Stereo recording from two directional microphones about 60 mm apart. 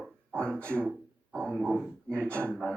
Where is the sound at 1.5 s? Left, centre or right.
Centre.